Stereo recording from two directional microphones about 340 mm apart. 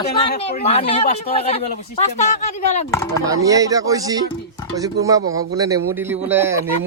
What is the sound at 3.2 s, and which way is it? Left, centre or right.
A man's voice, centre.